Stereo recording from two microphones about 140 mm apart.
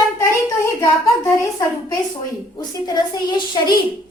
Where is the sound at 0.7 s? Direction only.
20° left (ahead or behind).